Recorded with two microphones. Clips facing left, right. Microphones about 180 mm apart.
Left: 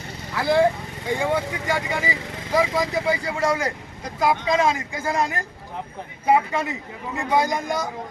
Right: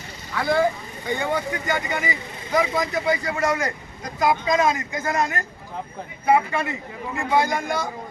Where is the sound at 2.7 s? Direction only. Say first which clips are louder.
Even; 10° left (ahead or behind).